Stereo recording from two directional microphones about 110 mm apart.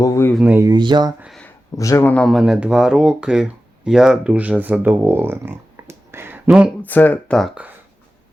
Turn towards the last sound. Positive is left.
turn(degrees=15)  # may be behind; listen again after turning